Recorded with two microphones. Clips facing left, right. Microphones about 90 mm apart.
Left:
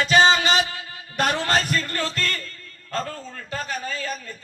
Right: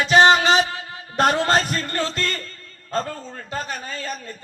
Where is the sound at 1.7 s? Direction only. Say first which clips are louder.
Right 1 dB; 40° right (ahead or behind).